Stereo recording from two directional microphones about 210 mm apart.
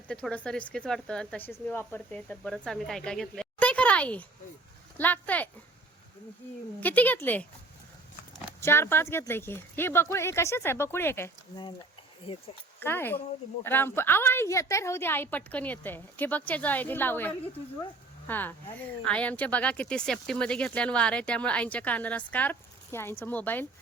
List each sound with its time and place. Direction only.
0.1 s speech: 5° left (ahead or behind)
6.7 s speech: 10° left (ahead or behind)
8.6 s speech: 10° left (ahead or behind)
12.3 s speech: 25° left (ahead or behind)
12.8 s speech: 10° left (ahead or behind)